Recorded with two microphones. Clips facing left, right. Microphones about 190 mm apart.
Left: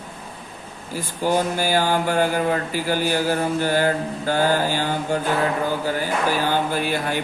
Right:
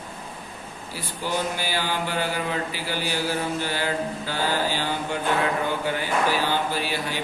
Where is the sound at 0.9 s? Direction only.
45° left (ahead or behind).